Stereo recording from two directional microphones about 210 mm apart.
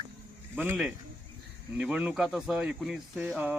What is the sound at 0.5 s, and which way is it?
A man's voice, 5° right (ahead or behind).